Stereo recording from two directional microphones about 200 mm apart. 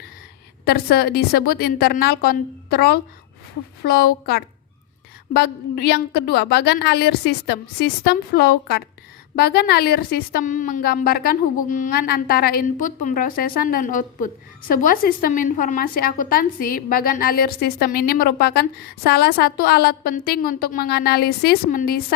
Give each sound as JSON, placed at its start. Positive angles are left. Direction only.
{"t": 0.6, "sound": "a woman's voice", "side_deg": 50}